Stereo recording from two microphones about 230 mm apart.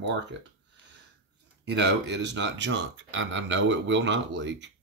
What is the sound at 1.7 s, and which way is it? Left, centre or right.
Speech, right.